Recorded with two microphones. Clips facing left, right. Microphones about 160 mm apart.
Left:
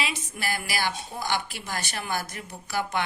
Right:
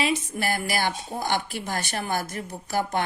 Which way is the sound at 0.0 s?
45° right (ahead or behind).